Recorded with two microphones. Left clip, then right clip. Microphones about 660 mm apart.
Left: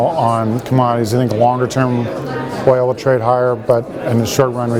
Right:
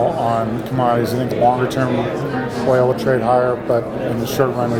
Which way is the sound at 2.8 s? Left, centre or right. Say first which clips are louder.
Left 1 dB; left.